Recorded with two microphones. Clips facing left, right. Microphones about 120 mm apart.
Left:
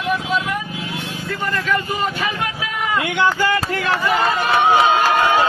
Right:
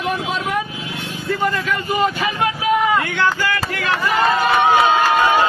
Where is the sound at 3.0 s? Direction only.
20° left (ahead or behind).